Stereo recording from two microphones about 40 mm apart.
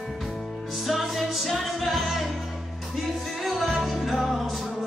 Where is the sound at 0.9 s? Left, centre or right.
Centre.